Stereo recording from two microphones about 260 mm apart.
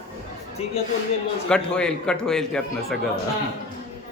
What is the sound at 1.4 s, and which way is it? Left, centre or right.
A man's voice, centre.